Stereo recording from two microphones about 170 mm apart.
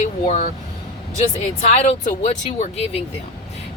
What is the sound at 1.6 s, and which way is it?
Speech, 40° left (ahead or behind).